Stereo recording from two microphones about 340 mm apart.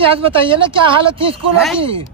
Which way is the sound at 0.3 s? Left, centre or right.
Centre.